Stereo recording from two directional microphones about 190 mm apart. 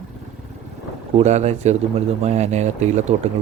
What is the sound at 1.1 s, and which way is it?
A man's voice, 35° right (ahead or behind).